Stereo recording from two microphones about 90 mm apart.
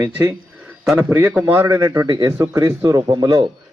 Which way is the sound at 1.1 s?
20° right (ahead or behind).